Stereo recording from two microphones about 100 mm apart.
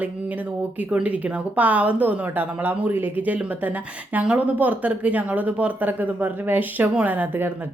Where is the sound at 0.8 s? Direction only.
10° right (ahead or behind).